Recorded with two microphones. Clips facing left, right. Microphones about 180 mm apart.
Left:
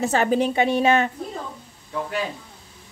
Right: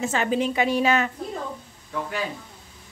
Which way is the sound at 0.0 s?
40° left (ahead or behind).